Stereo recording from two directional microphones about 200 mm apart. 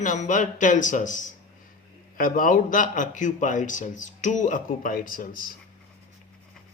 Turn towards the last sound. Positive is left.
turn(degrees=45)  # may be behind; listen again after turning